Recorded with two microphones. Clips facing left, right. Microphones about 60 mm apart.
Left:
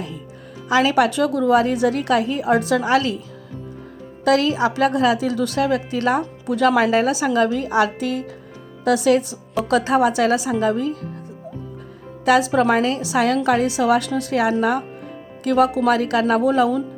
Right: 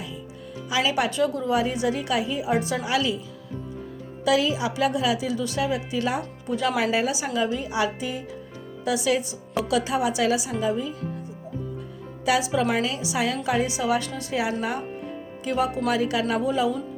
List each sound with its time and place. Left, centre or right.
0.7 s a woman's voice: left
4.2 s a woman's voice: left
6.7 s a woman's voice: left
9.6 s a woman's voice: left
12.2 s a woman's voice: left